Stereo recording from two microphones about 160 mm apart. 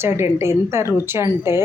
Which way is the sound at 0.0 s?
15° right (ahead or behind).